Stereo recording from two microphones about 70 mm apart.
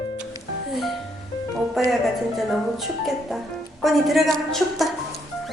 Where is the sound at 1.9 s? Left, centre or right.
Centre.